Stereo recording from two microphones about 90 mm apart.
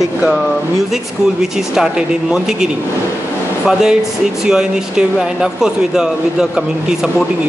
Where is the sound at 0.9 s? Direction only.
5° right (ahead or behind).